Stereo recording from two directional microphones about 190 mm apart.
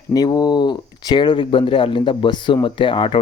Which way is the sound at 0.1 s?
20° left (ahead or behind).